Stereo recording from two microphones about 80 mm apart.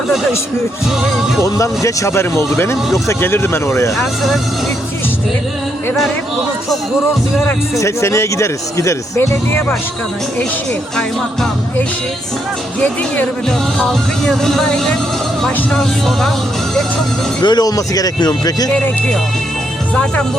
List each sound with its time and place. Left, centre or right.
1.4 s speech: left
3.9 s speech: centre
7.8 s speech: left
13.7 s speech: centre
17.4 s speech: left